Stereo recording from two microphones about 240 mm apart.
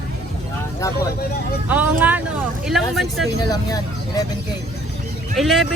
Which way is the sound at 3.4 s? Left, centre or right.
Centre.